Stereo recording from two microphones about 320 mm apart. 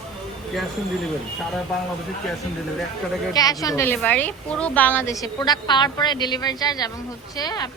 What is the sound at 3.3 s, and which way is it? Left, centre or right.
A woman's voice, centre.